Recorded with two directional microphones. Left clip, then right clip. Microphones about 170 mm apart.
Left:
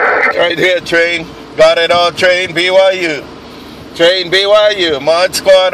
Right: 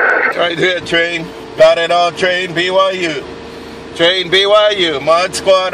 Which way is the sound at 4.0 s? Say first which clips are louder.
Left 2 dB; 30° left (ahead or behind).